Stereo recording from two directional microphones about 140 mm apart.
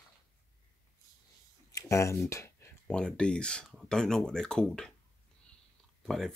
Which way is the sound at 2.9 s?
5° left (ahead or behind).